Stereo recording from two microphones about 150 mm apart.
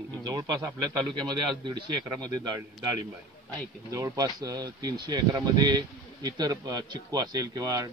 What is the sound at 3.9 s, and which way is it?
Speech, 20° right (ahead or behind).